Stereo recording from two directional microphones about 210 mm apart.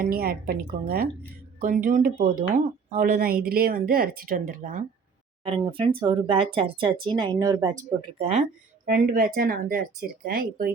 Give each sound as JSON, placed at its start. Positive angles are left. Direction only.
{"t": 0.0, "sound": "speech", "side_deg": -45}
{"t": 5.5, "sound": "speech", "side_deg": -25}
{"t": 8.2, "sound": "speech", "side_deg": -30}
{"t": 8.9, "sound": "speech", "side_deg": -45}